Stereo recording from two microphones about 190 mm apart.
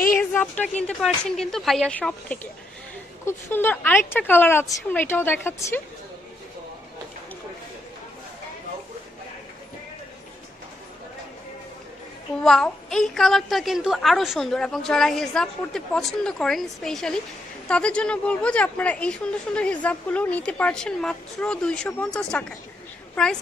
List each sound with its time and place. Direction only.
0.2 s a sound: 10° left (ahead or behind)
0.8 s a woman's voice: 5° left (ahead or behind)
12.4 s a woman's voice: 5° left (ahead or behind)